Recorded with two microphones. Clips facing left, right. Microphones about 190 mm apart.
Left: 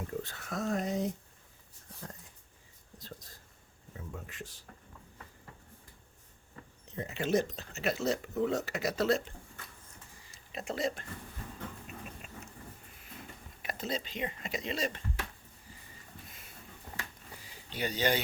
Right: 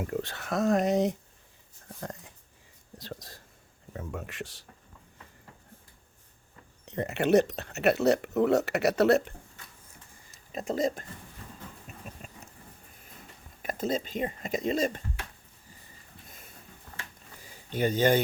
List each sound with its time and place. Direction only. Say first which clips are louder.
0.0 s speech: right 6 dB; 80° right
2.0 s wheeze: right 8 dB; 75° right (ahead or behind)
3.0 s speech: right 7 dB; 80° right
6.8 s speech: right 8 dB; 70° right (ahead or behind)
10.5 s speech: right 6 dB; 40° right (ahead or behind)
11.9 s a sound: left 2 dB; 40° right (ahead or behind)
13.6 s speech: right 7 dB; 45° right (ahead or behind)
16.9 s a sound: left 2 dB; 20° left (ahead or behind)
17.4 s a sound: right 8 dB; 50° right (ahead or behind)